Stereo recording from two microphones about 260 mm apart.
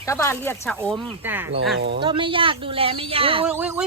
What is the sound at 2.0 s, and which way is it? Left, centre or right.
Speech, centre.